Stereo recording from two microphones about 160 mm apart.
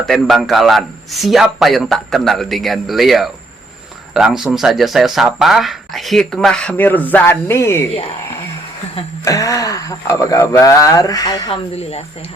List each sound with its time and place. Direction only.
0.0 s speech: centre (ahead or behind); by 7.9 s 15° left (ahead or behind)
9.2 s speech: 20° left (ahead or behind)
11.7 s speech: 40° left (ahead or behind)